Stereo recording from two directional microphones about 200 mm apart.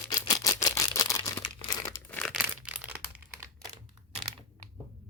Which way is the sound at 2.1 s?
5° left (ahead or behind).